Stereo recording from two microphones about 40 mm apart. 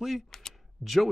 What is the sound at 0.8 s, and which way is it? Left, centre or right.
Speech, left.